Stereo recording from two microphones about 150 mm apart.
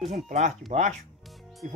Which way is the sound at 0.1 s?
50° right (ahead or behind).